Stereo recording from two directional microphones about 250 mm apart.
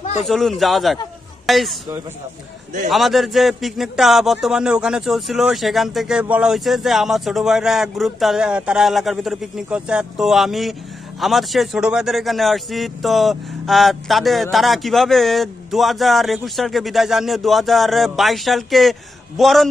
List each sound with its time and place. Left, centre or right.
0.0 s a sound: left
0.3 s a man's voice: centre
2.9 s a man's voice: centre